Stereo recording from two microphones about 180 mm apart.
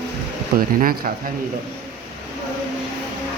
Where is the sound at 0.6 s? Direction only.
55° right (ahead or behind).